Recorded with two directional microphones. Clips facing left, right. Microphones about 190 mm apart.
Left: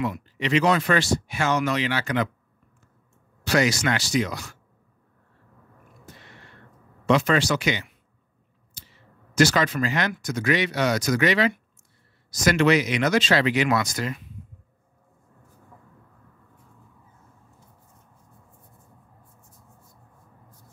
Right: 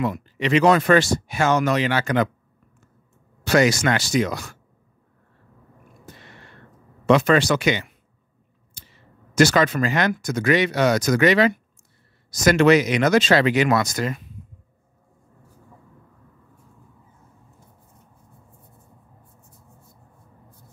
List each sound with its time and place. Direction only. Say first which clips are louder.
0.0 s speech: right 3 dB; 50° right (ahead or behind)
3.4 s speech: right 4 dB; 50° right (ahead or behind)
7.1 s speech: right 4 dB; 55° right (ahead or behind)
9.3 s speech: right 3 dB; 50° right (ahead or behind)